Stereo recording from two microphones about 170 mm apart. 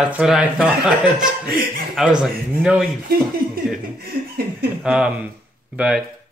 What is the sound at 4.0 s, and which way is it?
Speech, 65° right (ahead or behind).